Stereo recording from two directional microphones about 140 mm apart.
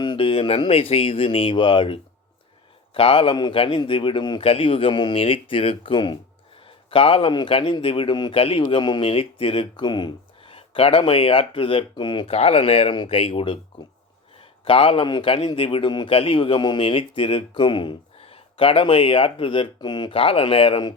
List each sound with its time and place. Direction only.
0.0 s a man's voice: 35° left (ahead or behind)
12.3 s a man's voice: 45° left (ahead or behind)